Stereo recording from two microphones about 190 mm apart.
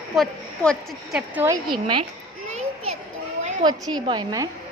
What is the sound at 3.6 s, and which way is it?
Speech, 20° right (ahead or behind).